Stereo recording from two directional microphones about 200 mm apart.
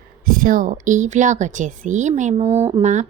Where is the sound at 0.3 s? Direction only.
45° right (ahead or behind).